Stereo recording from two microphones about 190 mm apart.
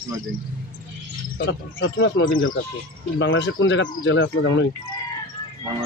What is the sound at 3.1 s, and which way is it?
Speech, 70° left (ahead or behind).